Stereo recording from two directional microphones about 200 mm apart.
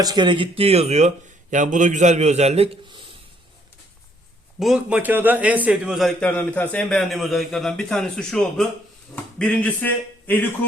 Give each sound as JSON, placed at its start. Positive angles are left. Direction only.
{"t": 0.0, "sound": "speech", "side_deg": -20}
{"t": 4.6, "sound": "a man's voice", "side_deg": -5}